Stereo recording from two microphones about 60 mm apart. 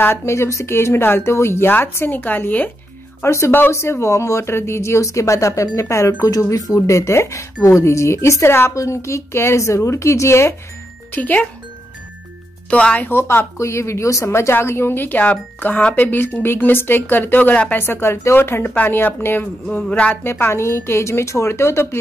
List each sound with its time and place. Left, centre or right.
0.0 s a woman's voice: left
3.3 s a woman's voice: left
6.3 s a woman's voice: left
8.7 s a woman's voice: left
11.1 s speech: left
12.6 s speech: left
13.1 s speech: left
13.6 s a woman's voice: left
18.7 s speech: left
20.2 s a woman's voice: left